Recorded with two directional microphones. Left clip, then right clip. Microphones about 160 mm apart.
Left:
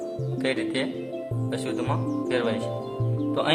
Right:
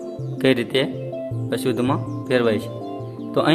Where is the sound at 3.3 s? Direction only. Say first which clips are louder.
Right 6 dB; 50° right (ahead or behind).